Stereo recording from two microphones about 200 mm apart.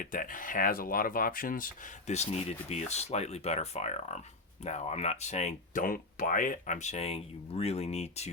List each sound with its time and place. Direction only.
0.0 s speech: 40° left (ahead or behind)